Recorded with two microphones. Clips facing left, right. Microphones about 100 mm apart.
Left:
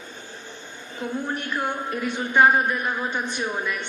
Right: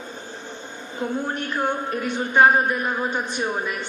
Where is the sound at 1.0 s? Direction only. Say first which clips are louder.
Right 2 dB; 35° right (ahead or behind).